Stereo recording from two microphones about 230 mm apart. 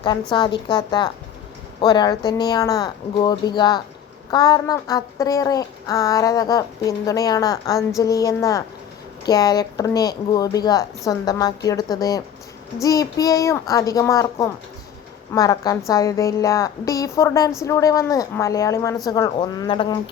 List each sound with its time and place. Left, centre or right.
0.0 s a woman's voice: centre